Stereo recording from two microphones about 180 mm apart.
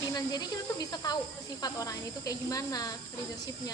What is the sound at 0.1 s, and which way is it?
Speech, 20° left (ahead or behind).